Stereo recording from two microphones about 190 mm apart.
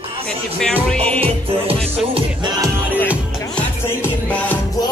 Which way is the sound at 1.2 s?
30° right (ahead or behind).